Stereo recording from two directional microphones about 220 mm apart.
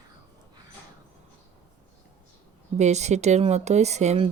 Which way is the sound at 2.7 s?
30° right (ahead or behind).